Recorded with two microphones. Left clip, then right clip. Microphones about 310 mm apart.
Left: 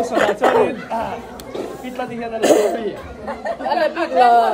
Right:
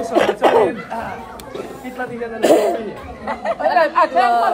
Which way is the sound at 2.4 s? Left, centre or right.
Centre.